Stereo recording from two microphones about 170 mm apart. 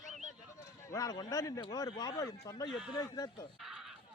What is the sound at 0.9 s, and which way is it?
A man's voice, 20° left (ahead or behind).